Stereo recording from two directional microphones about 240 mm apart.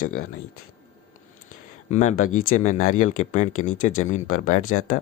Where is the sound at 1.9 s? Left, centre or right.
Left.